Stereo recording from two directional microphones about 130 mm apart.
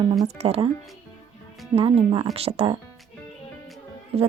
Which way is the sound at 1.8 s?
45° right (ahead or behind).